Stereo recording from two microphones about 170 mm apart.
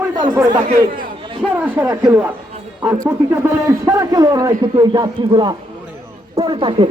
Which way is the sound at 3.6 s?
20° right (ahead or behind).